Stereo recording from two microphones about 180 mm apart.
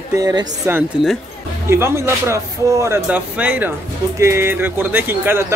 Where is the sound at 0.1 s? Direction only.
20° right (ahead or behind).